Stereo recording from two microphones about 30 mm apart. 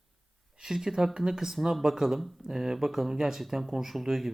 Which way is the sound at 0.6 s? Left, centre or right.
Centre.